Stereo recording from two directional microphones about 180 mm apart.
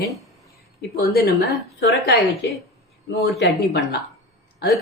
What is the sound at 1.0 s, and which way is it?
Speech, 65° left (ahead or behind).